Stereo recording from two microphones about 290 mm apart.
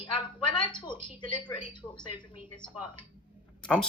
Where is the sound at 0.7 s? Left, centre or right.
Centre.